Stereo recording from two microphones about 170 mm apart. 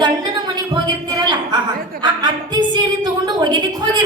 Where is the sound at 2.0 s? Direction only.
25° right (ahead or behind).